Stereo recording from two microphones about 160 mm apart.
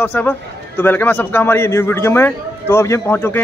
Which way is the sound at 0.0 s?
10° left (ahead or behind).